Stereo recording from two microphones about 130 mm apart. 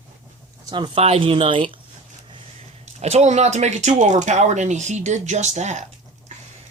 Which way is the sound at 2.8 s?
55° right (ahead or behind).